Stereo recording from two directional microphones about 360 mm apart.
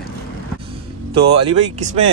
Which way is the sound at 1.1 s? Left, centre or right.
Centre.